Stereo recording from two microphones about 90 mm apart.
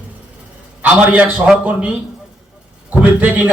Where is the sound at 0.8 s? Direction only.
15° right (ahead or behind).